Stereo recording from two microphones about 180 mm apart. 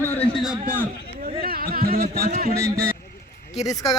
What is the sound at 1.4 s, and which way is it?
Music, 55° right (ahead or behind).